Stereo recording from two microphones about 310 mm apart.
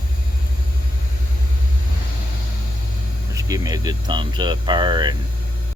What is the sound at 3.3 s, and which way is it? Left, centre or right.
Speech, centre.